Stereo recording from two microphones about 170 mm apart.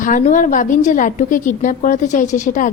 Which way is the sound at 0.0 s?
50° left (ahead or behind).